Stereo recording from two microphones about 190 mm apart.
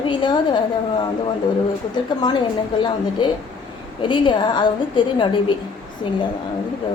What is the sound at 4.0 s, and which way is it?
A woman's voice, 25° left (ahead or behind).